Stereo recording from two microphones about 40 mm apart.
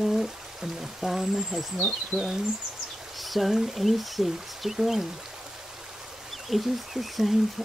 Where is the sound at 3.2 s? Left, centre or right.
Centre.